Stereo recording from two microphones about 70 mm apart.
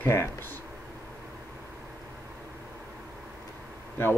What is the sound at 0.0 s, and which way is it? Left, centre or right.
Speech, left.